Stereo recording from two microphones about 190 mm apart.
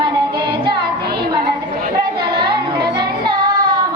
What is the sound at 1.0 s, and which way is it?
Music, 55° right (ahead or behind).